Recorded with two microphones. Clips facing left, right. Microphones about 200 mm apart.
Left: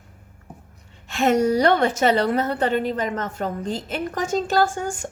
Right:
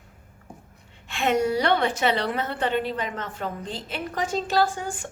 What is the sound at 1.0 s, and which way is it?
A woman's voice, 40° left (ahead or behind).